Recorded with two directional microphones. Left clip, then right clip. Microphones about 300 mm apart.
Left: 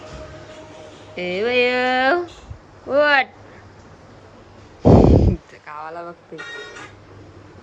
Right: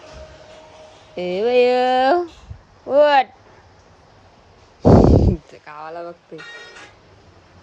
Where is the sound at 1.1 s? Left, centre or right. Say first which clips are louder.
Right 3 dB; centre.